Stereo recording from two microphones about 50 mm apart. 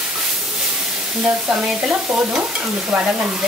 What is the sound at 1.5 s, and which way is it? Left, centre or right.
Stir, right.